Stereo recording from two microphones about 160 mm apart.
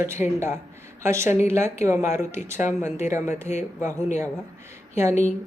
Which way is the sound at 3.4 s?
45° left (ahead or behind).